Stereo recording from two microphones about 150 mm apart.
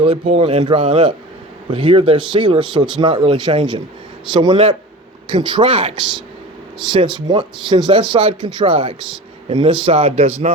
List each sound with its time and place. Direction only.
0.0 s speech: 40° right (ahead or behind)